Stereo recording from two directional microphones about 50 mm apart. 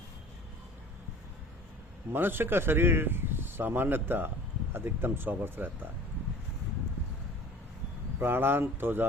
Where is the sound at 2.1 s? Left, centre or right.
Right.